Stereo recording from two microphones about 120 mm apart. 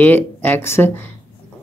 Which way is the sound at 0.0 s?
15° left (ahead or behind).